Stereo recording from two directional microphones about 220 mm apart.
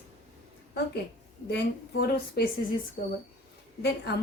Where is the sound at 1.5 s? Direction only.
50° left (ahead or behind).